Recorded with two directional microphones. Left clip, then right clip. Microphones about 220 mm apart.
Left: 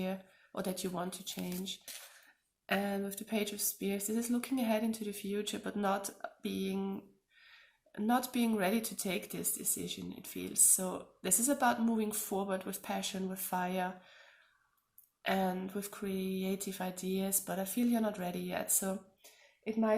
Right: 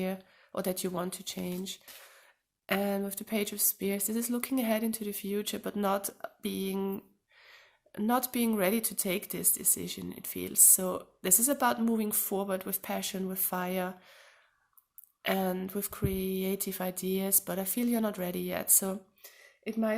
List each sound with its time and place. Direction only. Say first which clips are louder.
0.0 s speech: right 4 dB; 50° right (ahead or behind)